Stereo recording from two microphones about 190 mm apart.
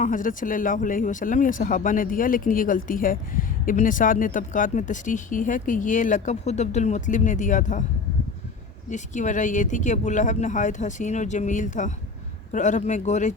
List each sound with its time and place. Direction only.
0.0 s speech: 45° left (ahead or behind)
8.9 s speech: 40° left (ahead or behind)